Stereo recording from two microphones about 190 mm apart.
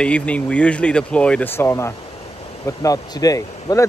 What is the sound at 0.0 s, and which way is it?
Speech, 5° left (ahead or behind).